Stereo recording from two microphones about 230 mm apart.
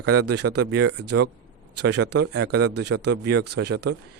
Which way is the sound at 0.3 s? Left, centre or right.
Right.